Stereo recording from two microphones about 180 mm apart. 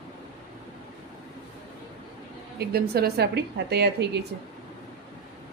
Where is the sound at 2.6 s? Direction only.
60° right (ahead or behind).